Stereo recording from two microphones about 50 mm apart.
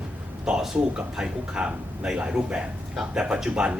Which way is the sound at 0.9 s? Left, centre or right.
Centre.